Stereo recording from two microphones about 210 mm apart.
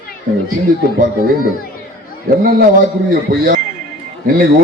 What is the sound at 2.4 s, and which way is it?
Speech, 40° right (ahead or behind).